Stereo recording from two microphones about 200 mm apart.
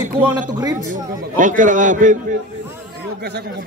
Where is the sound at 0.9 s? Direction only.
40° right (ahead or behind).